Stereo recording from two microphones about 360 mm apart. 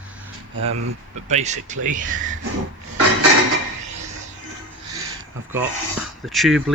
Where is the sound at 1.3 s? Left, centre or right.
Centre.